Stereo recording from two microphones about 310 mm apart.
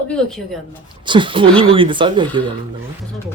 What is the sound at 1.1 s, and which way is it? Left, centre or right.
Speech, centre.